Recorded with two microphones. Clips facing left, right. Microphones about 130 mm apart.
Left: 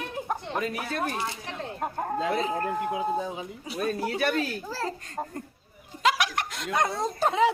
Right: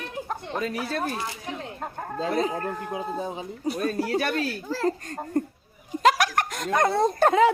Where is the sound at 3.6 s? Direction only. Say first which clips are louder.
Right 6 dB; 45° right (ahead or behind).